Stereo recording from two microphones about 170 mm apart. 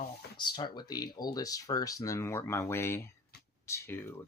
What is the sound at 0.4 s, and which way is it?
Speech, 25° left (ahead or behind).